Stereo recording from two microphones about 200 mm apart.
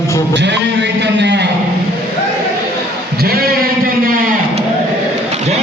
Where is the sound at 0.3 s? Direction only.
60° right (ahead or behind).